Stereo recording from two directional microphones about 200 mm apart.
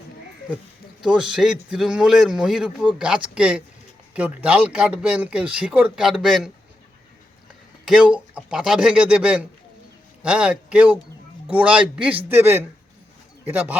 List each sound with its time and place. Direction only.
1.0 s speech: 5° right (ahead or behind)
7.9 s a man's voice: 5° right (ahead or behind)